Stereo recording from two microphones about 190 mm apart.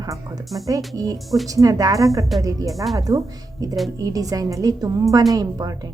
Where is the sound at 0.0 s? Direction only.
20° right (ahead or behind).